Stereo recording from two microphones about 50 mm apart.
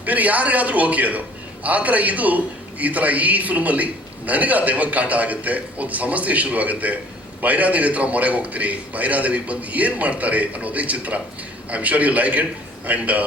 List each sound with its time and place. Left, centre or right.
0.0 s a man's voice: right